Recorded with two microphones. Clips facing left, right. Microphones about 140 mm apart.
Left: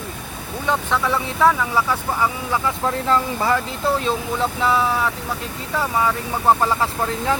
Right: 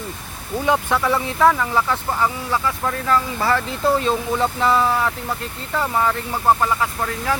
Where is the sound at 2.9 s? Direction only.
20° left (ahead or behind).